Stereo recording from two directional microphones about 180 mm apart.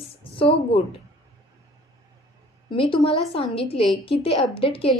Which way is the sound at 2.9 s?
30° left (ahead or behind).